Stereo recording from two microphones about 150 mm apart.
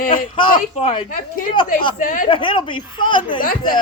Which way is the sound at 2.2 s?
35° left (ahead or behind).